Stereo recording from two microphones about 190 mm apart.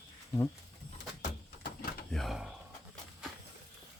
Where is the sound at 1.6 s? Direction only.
55° left (ahead or behind).